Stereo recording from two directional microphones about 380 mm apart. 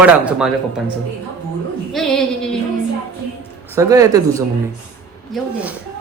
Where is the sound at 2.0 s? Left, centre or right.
Centre.